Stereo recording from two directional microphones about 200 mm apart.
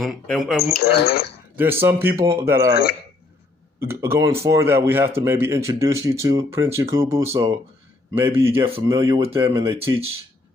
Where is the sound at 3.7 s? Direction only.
10° right (ahead or behind).